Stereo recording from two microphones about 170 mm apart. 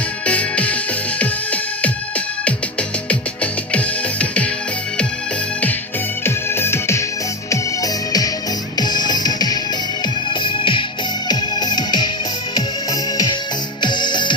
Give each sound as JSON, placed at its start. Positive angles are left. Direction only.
{"t": 0.3, "sound": "music", "side_deg": 10}
{"t": 6.2, "sound": "music", "side_deg": 15}